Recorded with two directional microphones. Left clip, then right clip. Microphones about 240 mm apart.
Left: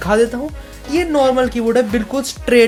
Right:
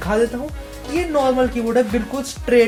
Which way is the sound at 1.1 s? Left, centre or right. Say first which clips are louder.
Left 3 dB; left.